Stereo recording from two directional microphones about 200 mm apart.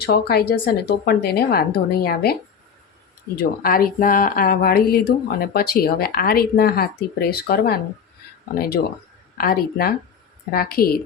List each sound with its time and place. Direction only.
0.0 s speech: 55° left (ahead or behind)
3.6 s speech: 45° left (ahead or behind)